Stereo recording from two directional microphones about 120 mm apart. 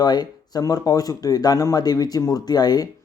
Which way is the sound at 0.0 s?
35° left (ahead or behind).